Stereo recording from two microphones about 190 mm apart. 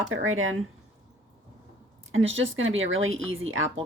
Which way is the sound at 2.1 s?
85° right.